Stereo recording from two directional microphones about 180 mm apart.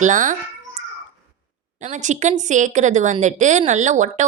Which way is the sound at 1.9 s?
45° right (ahead or behind).